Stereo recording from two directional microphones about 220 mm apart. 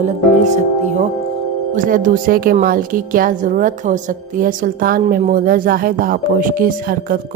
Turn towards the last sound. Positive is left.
turn(degrees=-40)  # may be behind; listen again after turning